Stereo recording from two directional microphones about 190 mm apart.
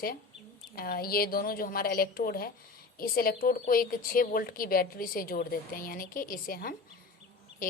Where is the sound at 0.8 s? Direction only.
50° left (ahead or behind).